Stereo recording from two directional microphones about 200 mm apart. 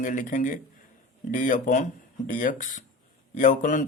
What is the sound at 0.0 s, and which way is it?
A man's voice, 40° left (ahead or behind).